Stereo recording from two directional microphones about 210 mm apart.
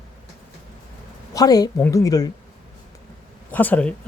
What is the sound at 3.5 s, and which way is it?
Speech, 10° left (ahead or behind).